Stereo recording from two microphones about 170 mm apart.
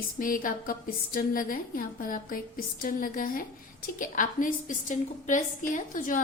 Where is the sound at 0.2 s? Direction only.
55° left (ahead or behind).